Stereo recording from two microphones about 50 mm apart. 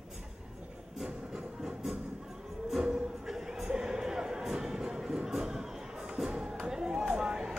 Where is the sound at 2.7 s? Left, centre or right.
Centre.